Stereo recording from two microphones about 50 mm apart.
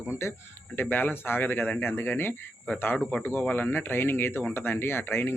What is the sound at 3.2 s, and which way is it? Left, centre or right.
Speech, left.